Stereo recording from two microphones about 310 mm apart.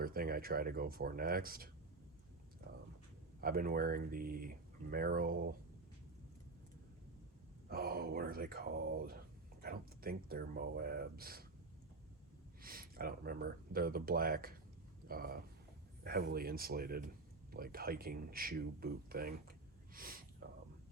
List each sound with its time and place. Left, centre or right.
0.0 s speech: right
3.4 s speech: right
7.7 s speech: right
12.6 s speech: right